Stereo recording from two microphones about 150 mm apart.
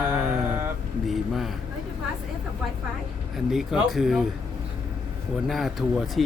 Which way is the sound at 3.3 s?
5° right (ahead or behind).